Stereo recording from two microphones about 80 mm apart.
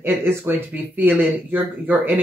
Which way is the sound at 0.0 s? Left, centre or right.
Right.